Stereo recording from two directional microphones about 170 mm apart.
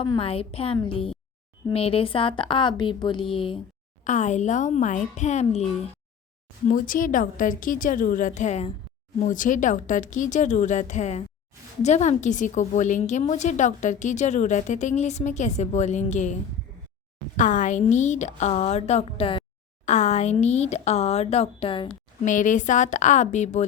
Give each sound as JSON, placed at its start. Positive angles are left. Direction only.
{"t": 0.0, "sound": "speech", "side_deg": 30}
{"t": 4.0, "sound": "a woman's voice", "side_deg": 45}
{"t": 6.7, "sound": "a woman's voice", "side_deg": 50}
{"t": 17.3, "sound": "a woman's voice", "side_deg": 45}
{"t": 22.2, "sound": "a woman's voice", "side_deg": 50}